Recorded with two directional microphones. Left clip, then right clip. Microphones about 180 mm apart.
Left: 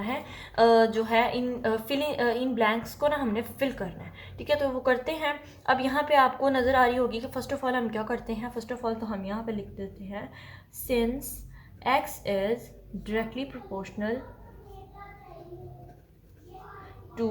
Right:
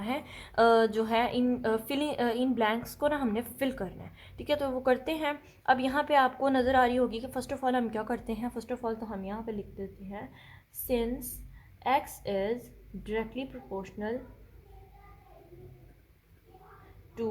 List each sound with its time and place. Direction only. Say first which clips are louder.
0.0 s a woman's voice: left 2 dB; 45° right (ahead or behind)